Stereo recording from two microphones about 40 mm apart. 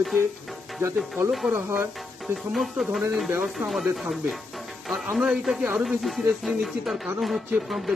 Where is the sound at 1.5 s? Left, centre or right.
Right.